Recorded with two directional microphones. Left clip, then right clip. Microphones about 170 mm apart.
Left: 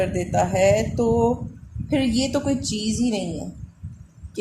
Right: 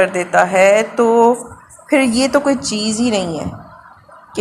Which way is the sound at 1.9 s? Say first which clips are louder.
Right 9 dB; 35° right (ahead or behind).